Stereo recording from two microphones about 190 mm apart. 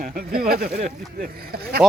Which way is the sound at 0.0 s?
50° right (ahead or behind).